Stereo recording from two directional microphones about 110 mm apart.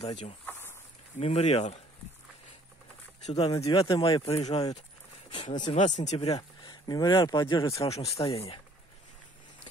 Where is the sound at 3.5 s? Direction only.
30° left (ahead or behind).